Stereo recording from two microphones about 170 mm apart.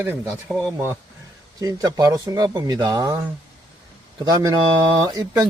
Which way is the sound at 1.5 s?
20° right (ahead or behind).